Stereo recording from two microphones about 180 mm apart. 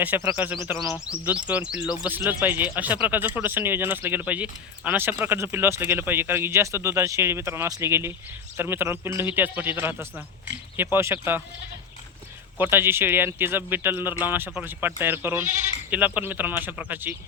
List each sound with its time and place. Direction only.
0.0 s speech: 10° right (ahead or behind)
12.5 s speech: 10° right (ahead or behind)